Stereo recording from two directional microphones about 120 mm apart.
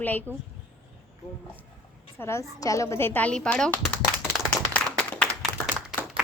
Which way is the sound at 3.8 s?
Centre (ahead or behind).